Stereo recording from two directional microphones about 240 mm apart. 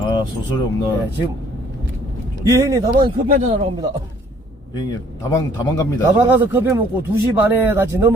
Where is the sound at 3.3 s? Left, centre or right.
Right.